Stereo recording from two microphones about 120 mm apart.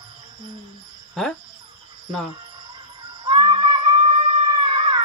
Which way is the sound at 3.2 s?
45° right (ahead or behind).